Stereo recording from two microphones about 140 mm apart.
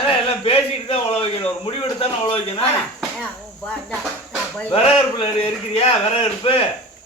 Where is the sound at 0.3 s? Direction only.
45° left (ahead or behind).